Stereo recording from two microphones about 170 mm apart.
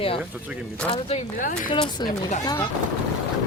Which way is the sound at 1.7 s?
25° left (ahead or behind).